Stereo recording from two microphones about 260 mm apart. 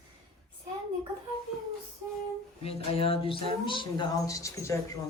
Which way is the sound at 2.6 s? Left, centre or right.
Left.